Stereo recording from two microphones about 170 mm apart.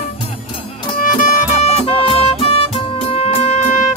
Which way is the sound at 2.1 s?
35° left (ahead or behind).